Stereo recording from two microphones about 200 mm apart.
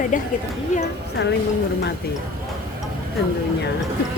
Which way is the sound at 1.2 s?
60° left (ahead or behind).